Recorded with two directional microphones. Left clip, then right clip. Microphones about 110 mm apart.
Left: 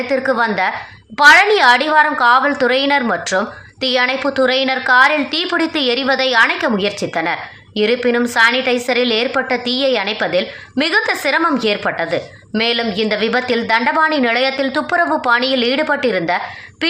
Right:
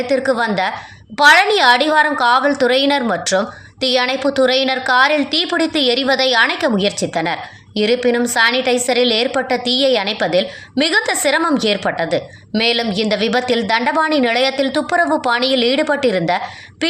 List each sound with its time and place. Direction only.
0.0 s a woman's voice: 30° right (ahead or behind)